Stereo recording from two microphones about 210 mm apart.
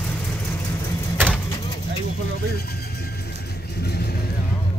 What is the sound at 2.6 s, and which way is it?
Vehicle, 50° left (ahead or behind).